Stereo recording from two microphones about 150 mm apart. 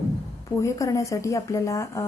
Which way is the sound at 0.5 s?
20° left (ahead or behind).